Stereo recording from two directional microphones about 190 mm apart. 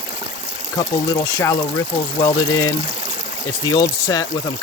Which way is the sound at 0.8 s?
15° left (ahead or behind).